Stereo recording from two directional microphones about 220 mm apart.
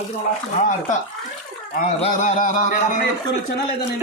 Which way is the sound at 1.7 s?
35° left (ahead or behind).